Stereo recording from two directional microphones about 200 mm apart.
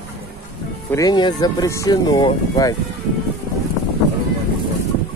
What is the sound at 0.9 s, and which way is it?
Speech, 15° left (ahead or behind).